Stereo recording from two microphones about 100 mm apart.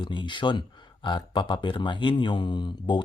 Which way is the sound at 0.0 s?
50° left (ahead or behind).